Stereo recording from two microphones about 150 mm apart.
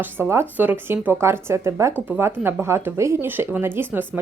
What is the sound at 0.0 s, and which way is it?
Speech, 15° right (ahead or behind).